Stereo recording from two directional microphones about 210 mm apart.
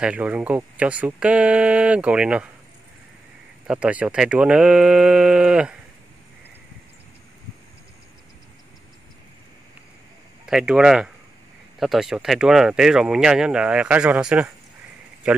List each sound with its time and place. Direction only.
0.0 s speech: 5° right (ahead or behind)
3.6 s speech: 5° right (ahead or behind)
10.4 s speech: 5° right (ahead or behind)